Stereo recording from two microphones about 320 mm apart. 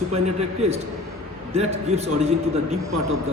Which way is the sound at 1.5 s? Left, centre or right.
Centre.